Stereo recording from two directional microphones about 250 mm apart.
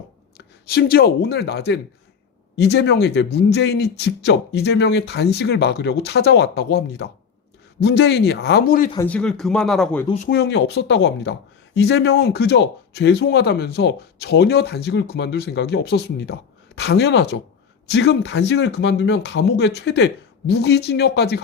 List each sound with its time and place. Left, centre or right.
0.3 s speech: left
9.0 s speech: centre
10.2 s speech: left